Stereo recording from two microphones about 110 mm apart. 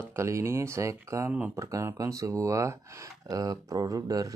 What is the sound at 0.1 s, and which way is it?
Speech, 25° right (ahead or behind).